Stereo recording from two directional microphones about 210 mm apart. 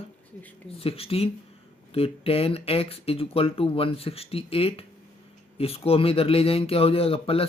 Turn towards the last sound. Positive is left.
turn(degrees=25)  # may be behind; listen again after turning